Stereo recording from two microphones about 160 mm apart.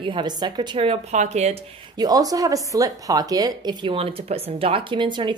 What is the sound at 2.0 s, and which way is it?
Speech, 25° right (ahead or behind).